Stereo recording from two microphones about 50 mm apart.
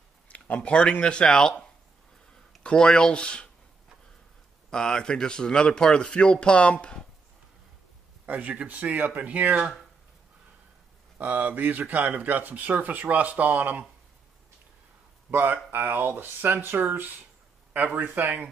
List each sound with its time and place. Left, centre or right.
0.3 s speech: left
2.6 s speech: centre
4.6 s speech: centre
8.3 s speech: right
11.1 s speech: right
15.3 s speech: right
18.1 s speech: right